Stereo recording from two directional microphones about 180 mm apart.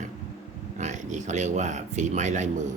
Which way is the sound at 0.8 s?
40° right (ahead or behind).